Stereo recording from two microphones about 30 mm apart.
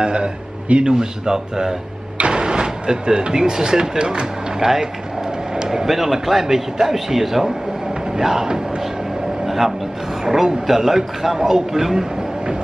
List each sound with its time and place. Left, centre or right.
0.0 s a man's voice: right
0.9 s speech: right
2.1 s a sound: right
3.3 s speech: right
5.9 s a man's voice: centre
10.2 s a man's voice: centre